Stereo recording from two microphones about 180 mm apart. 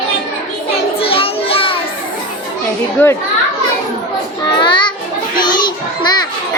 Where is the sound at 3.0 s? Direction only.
10° left (ahead or behind).